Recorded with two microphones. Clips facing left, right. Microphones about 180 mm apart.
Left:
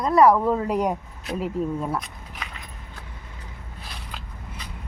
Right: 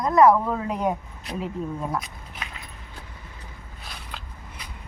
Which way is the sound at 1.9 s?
Centre (ahead or behind).